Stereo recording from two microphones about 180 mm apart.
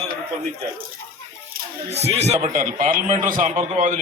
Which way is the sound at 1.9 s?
35° right (ahead or behind).